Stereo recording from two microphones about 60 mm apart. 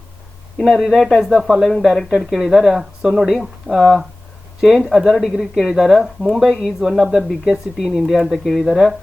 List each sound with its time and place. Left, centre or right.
0.6 s speech: centre